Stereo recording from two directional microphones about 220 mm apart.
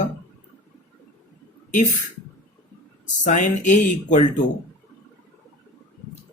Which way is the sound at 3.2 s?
35° left (ahead or behind).